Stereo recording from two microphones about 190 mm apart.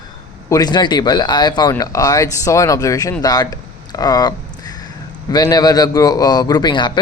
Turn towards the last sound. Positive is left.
turn(degrees=25)  # may be behind; listen again after turning